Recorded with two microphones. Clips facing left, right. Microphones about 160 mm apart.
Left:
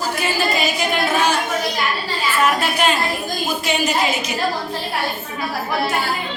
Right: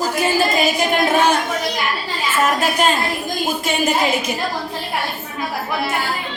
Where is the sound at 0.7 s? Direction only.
55° right (ahead or behind).